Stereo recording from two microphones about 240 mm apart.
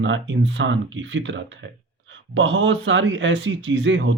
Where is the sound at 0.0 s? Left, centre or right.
Right.